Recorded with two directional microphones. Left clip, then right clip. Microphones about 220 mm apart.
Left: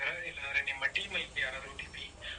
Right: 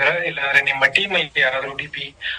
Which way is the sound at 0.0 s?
45° right (ahead or behind).